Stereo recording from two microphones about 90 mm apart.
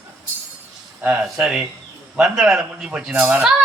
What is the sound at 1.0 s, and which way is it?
A man's voice, 5° right (ahead or behind).